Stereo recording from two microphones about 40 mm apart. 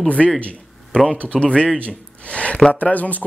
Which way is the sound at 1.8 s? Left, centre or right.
Left.